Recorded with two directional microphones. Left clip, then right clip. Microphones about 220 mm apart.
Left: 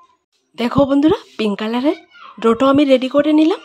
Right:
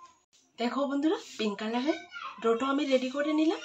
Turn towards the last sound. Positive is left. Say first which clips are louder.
# left 15 dB
turn(degrees=50)  # may be behind; listen again after turning